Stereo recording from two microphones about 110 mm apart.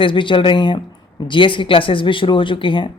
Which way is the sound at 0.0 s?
50° left (ahead or behind).